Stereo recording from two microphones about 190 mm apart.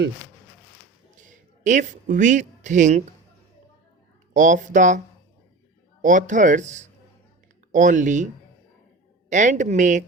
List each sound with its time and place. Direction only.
1.1 s a sound: 40° right (ahead or behind)
4.4 s speech: 40° right (ahead or behind)
6.0 s speech: 45° right (ahead or behind)
9.3 s speech: 40° right (ahead or behind)